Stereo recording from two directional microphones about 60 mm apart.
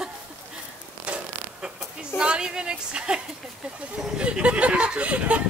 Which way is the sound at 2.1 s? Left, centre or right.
Centre.